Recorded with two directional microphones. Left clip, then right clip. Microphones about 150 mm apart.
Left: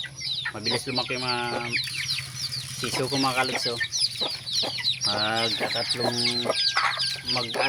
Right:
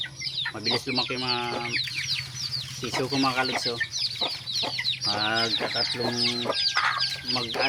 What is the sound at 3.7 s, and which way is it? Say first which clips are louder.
Chicken: left 2 dB; 30° left (ahead or behind).